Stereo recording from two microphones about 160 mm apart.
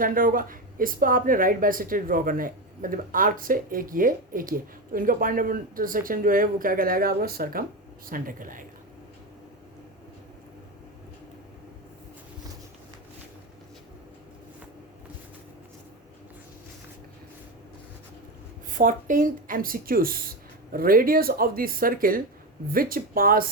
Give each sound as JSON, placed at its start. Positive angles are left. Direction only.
{"t": 0.0, "sound": "speech", "side_deg": -60}
{"t": 18.7, "sound": "speech", "side_deg": -55}